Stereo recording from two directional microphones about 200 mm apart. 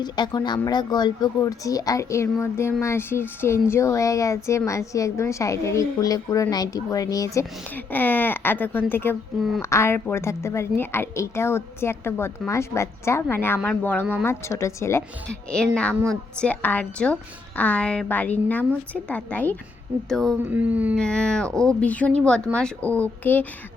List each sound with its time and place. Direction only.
0.0 s speech: 20° left (ahead or behind)
14.0 s speech: 10° right (ahead or behind)
14.3 s speech: 15° left (ahead or behind); by 20.9 s 5° right (ahead or behind)
20.9 s speech: 5° left (ahead or behind)